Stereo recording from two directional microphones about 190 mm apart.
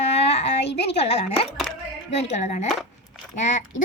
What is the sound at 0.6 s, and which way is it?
Speech, 65° left (ahead or behind).